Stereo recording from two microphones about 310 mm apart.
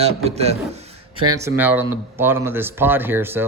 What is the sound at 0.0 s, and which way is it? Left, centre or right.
A man's voice, centre.